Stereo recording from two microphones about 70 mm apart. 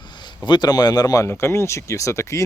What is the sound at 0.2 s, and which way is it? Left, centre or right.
Speech, left.